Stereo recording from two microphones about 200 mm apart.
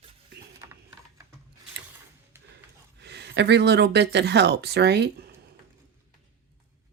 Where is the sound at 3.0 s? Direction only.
55° right (ahead or behind).